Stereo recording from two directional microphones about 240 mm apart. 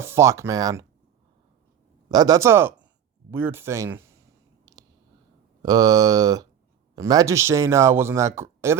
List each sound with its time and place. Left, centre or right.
0.0 s speech: centre
2.0 s speech: centre
4.6 s a sound: centre
5.6 s speech: centre